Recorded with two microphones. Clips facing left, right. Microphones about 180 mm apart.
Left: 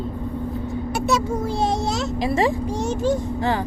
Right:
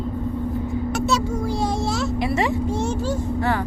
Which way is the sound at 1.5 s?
25° left (ahead or behind).